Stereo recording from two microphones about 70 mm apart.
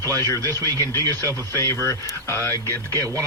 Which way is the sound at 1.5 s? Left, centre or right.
Left.